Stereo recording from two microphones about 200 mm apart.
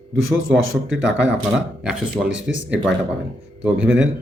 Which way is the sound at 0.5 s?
80° right.